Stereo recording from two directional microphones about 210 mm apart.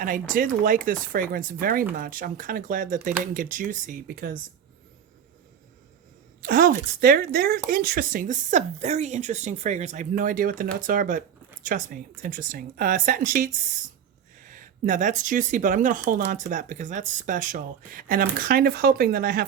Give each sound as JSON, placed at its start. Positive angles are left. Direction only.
{"t": 0.0, "sound": "speech", "side_deg": -40}
{"t": 6.4, "sound": "speech", "side_deg": -45}